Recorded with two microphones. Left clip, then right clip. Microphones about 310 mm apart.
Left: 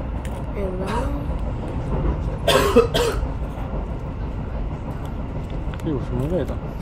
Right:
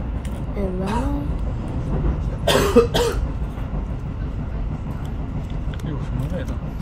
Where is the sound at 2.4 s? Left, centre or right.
Centre.